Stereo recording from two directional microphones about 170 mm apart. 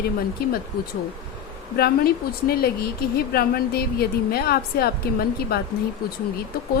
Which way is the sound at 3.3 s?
65° left (ahead or behind).